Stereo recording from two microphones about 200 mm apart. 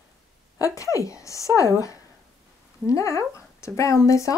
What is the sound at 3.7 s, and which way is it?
Speech, 15° left (ahead or behind).